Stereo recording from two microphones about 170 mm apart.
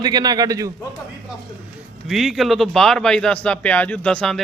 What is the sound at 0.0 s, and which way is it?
Speech, 25° right (ahead or behind).